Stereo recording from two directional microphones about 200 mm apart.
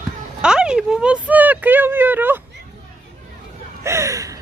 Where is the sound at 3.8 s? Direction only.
15° right (ahead or behind).